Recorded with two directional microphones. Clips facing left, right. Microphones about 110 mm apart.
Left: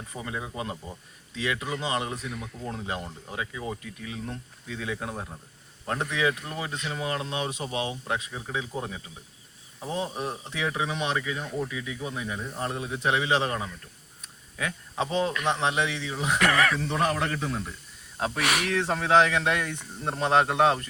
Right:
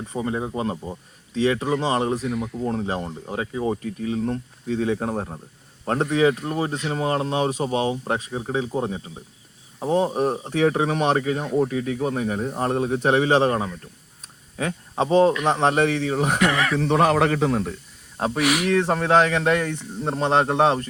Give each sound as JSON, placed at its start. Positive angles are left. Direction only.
{"t": 0.1, "sound": "speech", "side_deg": -30}
{"t": 16.4, "sound": "speech", "side_deg": -20}
{"t": 16.7, "sound": "speech", "side_deg": -75}
{"t": 18.3, "sound": "speech", "side_deg": -15}
{"t": 18.9, "sound": "speech", "side_deg": -45}